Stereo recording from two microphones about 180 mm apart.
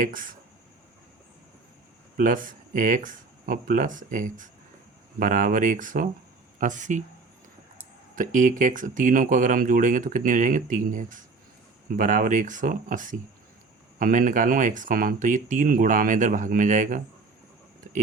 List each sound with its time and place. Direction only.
0.0 s speech: 50° right (ahead or behind)
2.1 s speech: 50° right (ahead or behind)
8.1 s speech: 45° right (ahead or behind)